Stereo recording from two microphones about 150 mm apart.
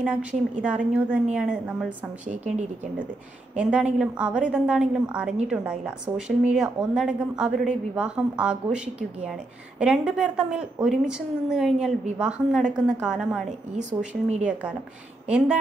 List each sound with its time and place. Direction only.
0.0 s a woman's voice: 10° right (ahead or behind)
2.2 s speech: 55° right (ahead or behind)
3.5 s a woman's voice: 5° right (ahead or behind)
13.5 s speech: 55° right (ahead or behind)
14.4 s a woman's voice: 10° right (ahead or behind)